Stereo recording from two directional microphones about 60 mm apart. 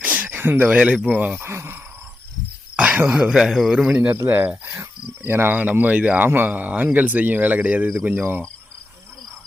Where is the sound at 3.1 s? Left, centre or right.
Centre.